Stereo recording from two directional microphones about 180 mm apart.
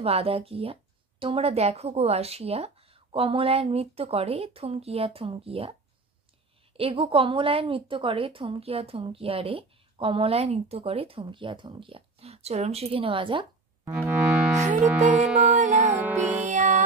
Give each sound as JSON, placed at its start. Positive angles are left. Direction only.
{"t": 0.0, "sound": "a woman's voice", "side_deg": -35}
{"t": 6.8, "sound": "a woman's voice", "side_deg": -30}
{"t": 14.5, "sound": "music", "side_deg": -40}
{"t": 16.0, "sound": "music", "side_deg": -10}
{"t": 16.4, "sound": "music", "side_deg": -45}